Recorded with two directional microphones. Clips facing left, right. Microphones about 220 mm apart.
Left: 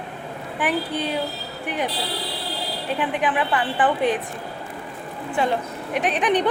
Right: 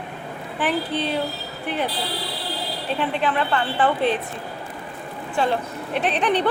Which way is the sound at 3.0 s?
15° left (ahead or behind).